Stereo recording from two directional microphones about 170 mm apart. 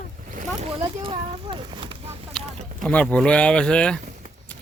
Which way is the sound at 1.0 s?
30° right (ahead or behind).